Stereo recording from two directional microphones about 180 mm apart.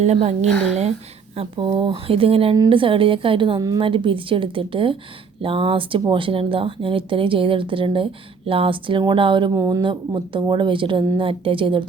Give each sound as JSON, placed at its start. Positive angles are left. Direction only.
{"t": 0.0, "sound": "speech", "side_deg": -40}
{"t": 1.4, "sound": "speech", "side_deg": -25}